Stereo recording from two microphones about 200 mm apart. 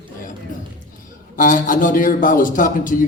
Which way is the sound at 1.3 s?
40° left (ahead or behind).